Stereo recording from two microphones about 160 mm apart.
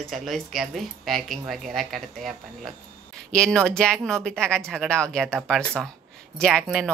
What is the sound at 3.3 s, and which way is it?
Speech, 5° left (ahead or behind).